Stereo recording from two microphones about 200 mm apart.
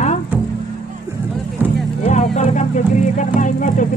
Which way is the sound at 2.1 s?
35° left (ahead or behind).